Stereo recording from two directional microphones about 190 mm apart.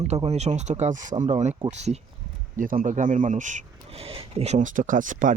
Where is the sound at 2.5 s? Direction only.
45° right (ahead or behind).